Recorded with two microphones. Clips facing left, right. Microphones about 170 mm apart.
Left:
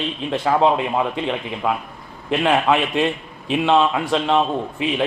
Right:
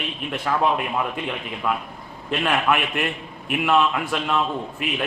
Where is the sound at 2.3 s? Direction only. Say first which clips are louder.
Left 4 dB; 20° left (ahead or behind).